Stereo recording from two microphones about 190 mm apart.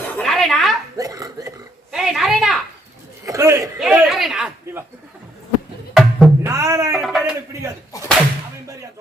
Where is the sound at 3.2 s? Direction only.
15° right (ahead or behind).